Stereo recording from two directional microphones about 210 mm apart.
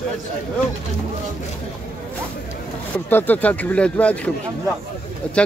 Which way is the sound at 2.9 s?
10° left (ahead or behind).